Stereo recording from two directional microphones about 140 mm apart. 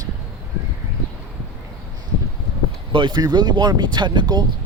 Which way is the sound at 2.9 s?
30° right (ahead or behind).